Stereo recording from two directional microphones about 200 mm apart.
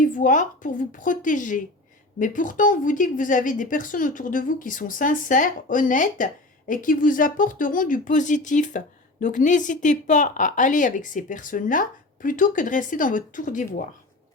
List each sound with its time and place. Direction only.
0.0 s a woman's voice: 40° left (ahead or behind)